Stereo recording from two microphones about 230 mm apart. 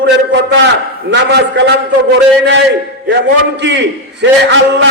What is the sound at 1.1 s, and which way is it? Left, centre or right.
A man's voice, right.